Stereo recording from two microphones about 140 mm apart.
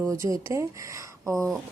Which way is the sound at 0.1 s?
20° right (ahead or behind).